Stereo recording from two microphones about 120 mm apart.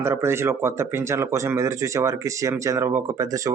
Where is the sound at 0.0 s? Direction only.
20° right (ahead or behind).